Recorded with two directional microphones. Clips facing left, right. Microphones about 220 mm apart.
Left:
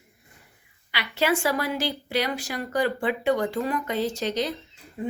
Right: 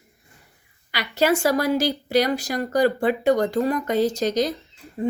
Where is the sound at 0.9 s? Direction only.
40° right (ahead or behind).